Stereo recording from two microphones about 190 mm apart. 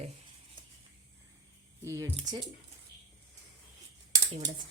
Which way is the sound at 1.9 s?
15° right (ahead or behind).